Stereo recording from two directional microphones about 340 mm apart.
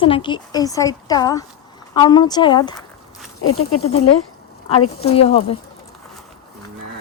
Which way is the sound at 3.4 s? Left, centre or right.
Left.